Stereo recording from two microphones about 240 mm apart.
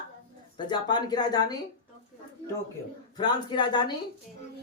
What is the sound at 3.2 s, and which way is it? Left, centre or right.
Speech, centre.